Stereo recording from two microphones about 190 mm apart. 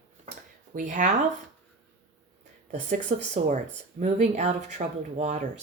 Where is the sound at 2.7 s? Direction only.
35° right (ahead or behind).